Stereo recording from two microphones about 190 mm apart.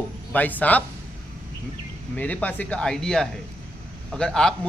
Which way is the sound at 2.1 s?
10° left (ahead or behind).